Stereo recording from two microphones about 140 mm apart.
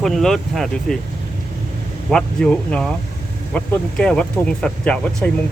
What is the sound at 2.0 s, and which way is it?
Speech, 5° left (ahead or behind).